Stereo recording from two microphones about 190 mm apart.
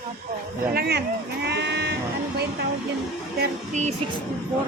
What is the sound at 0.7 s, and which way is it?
Sheep, 60° right (ahead or behind).